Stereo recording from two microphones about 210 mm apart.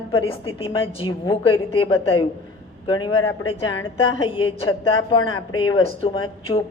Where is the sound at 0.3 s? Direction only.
25° left (ahead or behind).